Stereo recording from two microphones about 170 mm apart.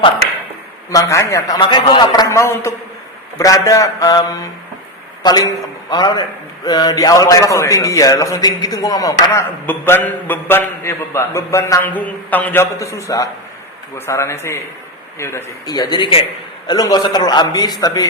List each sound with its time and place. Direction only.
0.9 s a man's voice: 20° left (ahead or behind)